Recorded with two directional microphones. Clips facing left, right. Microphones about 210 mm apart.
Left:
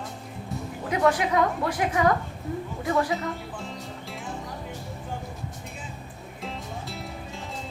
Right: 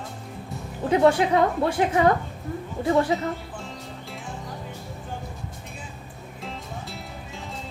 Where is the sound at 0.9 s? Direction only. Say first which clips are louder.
Right 4 dB; 30° right (ahead or behind).